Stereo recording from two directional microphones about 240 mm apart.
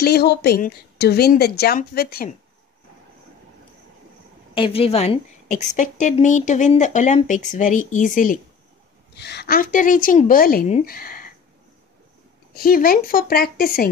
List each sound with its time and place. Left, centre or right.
0.0 s a woman's voice: left
4.6 s a woman's voice: left
9.1 s a woman's voice: left
12.5 s a woman's voice: left